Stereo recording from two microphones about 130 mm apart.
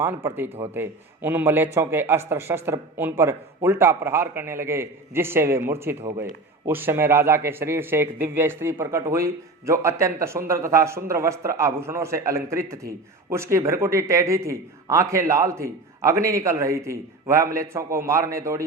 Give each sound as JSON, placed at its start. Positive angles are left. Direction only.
{"t": 0.0, "sound": "a man's voice", "side_deg": -20}